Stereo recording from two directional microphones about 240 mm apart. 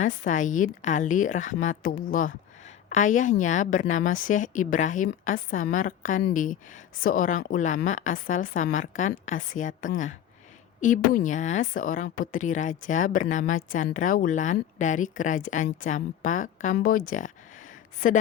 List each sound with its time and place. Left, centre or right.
0.0 s a woman's voice: left